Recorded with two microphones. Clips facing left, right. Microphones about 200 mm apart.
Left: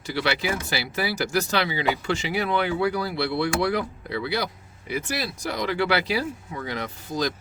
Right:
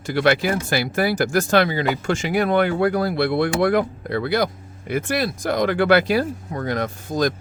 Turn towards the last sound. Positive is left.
turn(degrees=-50)  # may be behind; listen again after turning